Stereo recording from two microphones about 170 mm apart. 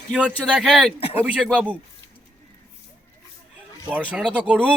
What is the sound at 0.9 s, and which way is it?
Speech, 35° left (ahead or behind).